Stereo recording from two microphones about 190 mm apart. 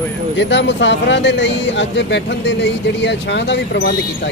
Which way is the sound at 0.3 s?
70° left (ahead or behind).